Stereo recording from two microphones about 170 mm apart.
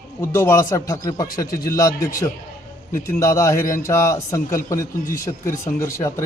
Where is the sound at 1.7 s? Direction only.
20° left (ahead or behind).